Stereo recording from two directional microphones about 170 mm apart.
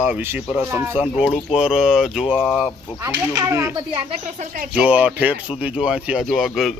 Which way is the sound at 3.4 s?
15° right (ahead or behind).